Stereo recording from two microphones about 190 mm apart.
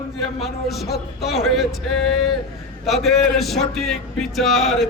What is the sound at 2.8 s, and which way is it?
Speech, centre (ahead or behind).